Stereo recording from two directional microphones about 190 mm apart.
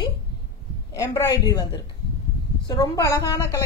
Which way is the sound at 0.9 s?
15° left (ahead or behind).